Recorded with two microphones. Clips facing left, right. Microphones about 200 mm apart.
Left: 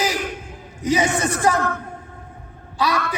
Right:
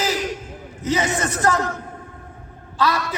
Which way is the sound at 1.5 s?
55° left (ahead or behind).